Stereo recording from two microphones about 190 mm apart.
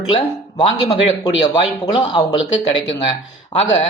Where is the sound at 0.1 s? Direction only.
25° left (ahead or behind).